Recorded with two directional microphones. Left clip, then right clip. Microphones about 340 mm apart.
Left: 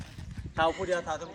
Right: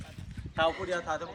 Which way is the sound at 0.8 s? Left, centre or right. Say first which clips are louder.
Left 1 dB; left.